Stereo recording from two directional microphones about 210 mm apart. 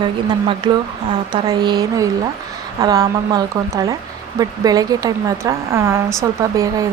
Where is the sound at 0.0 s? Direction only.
20° right (ahead or behind).